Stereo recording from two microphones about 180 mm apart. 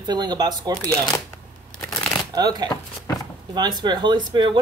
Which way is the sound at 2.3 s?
25° right (ahead or behind).